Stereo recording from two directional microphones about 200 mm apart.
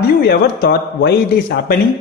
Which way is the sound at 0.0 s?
55° left (ahead or behind).